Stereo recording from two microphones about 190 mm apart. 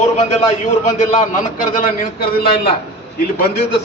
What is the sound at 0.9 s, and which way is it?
A man's voice, 40° left (ahead or behind).